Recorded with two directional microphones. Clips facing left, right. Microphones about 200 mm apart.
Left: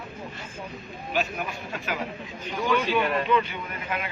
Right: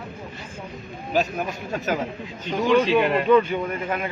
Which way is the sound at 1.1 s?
40° right (ahead or behind).